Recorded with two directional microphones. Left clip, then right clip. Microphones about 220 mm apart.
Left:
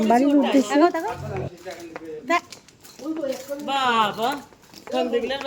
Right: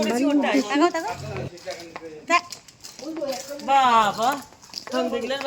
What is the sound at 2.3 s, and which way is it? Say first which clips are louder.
Speech: right 2 dB; 25° left (ahead or behind).